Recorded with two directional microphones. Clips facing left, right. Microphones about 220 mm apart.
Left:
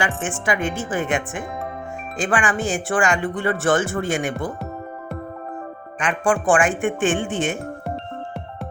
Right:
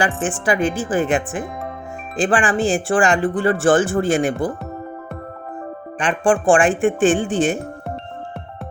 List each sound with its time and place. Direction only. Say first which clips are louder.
0.4 s speech: right 4 dB; 35° right (ahead or behind)
6.0 s speech: right 3 dB; 30° right (ahead or behind)